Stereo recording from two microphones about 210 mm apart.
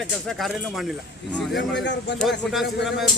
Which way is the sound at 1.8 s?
55° left (ahead or behind).